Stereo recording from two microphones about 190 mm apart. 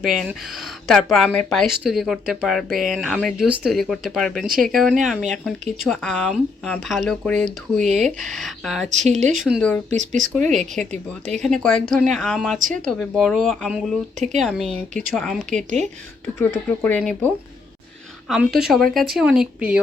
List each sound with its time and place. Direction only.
0.0 s speech: centre (ahead or behind)
8.9 s speech: 40° right (ahead or behind)
9.4 s speech: centre (ahead or behind)
9.9 s speech: 40° right (ahead or behind)
10.3 s speech: centre (ahead or behind)
18.3 s speech: centre (ahead or behind)